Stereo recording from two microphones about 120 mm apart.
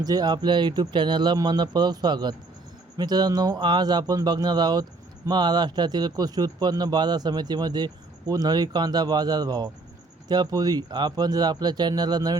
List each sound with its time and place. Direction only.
0.0 s speech: 35° right (ahead or behind)